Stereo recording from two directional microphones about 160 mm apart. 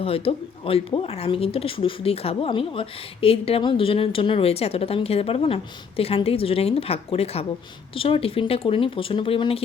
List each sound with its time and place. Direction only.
0.0 s speech: 35° left (ahead or behind)